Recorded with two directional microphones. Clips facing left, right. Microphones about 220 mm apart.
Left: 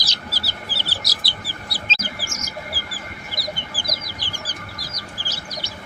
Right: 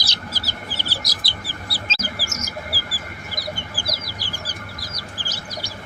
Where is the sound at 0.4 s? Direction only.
15° right (ahead or behind).